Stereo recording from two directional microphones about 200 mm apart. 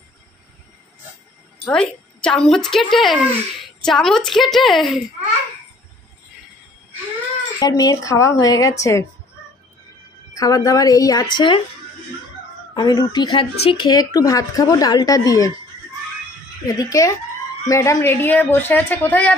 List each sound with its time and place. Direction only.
1.6 s a woman's voice: 5° left (ahead or behind)
7.5 s a woman's voice: 20° left (ahead or behind)
10.3 s a woman's voice: 15° left (ahead or behind)
12.7 s speech: 20° left (ahead or behind)
16.6 s a woman's voice: 15° left (ahead or behind)